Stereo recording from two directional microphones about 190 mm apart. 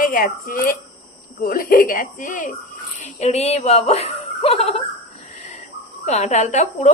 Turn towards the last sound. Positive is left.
turn(degrees=40)  # may be behind; listen again after turning